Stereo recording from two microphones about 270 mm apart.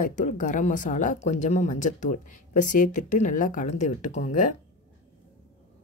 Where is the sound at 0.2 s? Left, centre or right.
Left.